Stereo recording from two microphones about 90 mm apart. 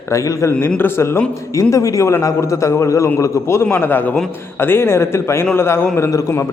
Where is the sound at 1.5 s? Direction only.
40° left (ahead or behind).